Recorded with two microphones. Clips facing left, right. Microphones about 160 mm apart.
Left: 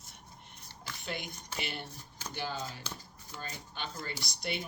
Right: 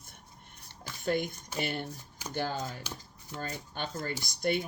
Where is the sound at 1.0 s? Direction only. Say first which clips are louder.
Right 10 dB; 45° right (ahead or behind).